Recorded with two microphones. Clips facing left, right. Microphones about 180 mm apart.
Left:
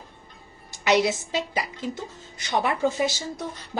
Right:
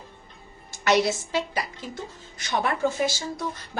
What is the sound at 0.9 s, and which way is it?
A woman's voice, 15° left (ahead or behind).